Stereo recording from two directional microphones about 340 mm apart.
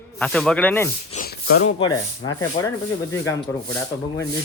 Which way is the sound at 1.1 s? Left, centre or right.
Left.